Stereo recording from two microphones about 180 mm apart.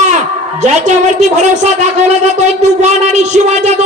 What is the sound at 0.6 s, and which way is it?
Speech, 40° right (ahead or behind).